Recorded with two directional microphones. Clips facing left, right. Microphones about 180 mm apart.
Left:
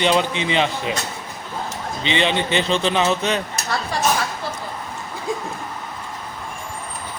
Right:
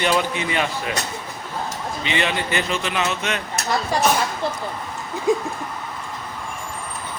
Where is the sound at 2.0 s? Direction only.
25° left (ahead or behind).